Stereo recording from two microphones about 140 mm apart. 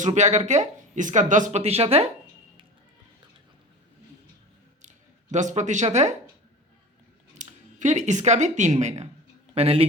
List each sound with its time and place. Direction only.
0.0 s speech: 55° right (ahead or behind)
5.3 s speech: 60° right (ahead or behind)
7.3 s a man's voice: 60° right (ahead or behind)